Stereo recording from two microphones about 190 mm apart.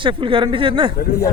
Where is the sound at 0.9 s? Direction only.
55° left (ahead or behind).